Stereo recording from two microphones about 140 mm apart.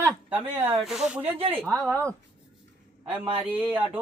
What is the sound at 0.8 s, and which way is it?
Speech, centre (ahead or behind).